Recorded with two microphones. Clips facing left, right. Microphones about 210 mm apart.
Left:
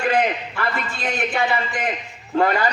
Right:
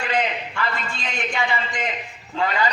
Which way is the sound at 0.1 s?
50° left (ahead or behind).